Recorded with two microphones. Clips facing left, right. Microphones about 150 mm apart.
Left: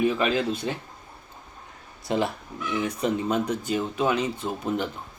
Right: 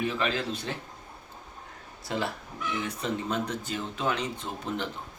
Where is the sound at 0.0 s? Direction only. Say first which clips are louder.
Left 6 dB; 15° left (ahead or behind).